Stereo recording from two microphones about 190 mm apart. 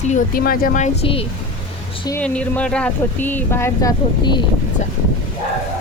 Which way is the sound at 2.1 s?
5° left (ahead or behind).